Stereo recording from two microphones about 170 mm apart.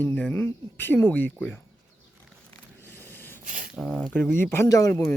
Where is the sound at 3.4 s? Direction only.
50° right (ahead or behind).